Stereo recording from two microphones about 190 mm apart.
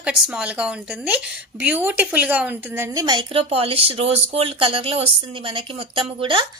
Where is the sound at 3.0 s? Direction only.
25° right (ahead or behind).